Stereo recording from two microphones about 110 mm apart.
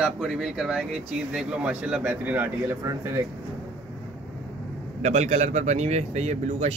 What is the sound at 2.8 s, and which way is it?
Speech, 30° right (ahead or behind).